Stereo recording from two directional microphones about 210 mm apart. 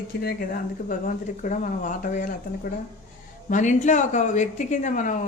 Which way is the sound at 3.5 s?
35° left (ahead or behind).